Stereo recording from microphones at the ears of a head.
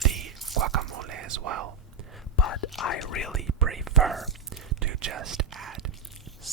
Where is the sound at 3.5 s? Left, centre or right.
Right.